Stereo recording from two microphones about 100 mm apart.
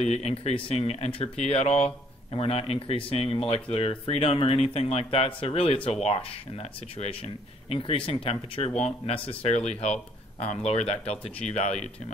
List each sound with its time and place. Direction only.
0.0 s speech: 85° left
2.3 s speech: 70° left (ahead or behind)
5.9 s speech: 80° left
7.7 s speech: 65° left (ahead or behind); by 11.9 s 90° left